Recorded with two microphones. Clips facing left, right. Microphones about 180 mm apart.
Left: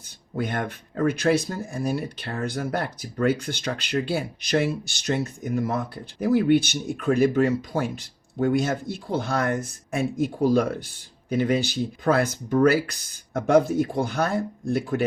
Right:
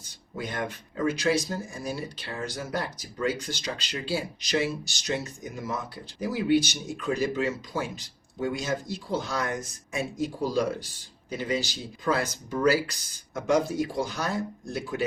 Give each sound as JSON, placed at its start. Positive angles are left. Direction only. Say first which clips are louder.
{"t": 0.3, "sound": "speech", "louder": "left 5 dB", "side_deg": 60}